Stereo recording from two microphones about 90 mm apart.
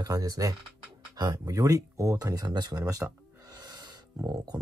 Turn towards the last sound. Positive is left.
turn(degrees=-45)  # may be behind; listen again after turning